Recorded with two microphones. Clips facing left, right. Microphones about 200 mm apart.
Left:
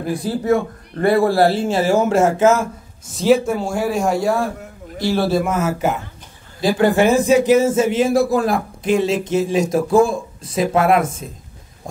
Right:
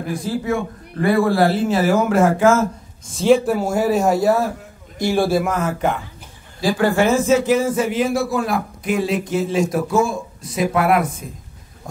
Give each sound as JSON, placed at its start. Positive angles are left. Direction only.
{"t": 0.0, "sound": "a man's voice", "side_deg": 35}
{"t": 3.1, "sound": "speech", "side_deg": 0}
{"t": 5.4, "sound": "speech", "side_deg": 5}
{"t": 6.8, "sound": "speech", "side_deg": 20}
{"t": 8.1, "sound": "a man's voice", "side_deg": 35}
{"t": 8.8, "sound": "speech", "side_deg": 25}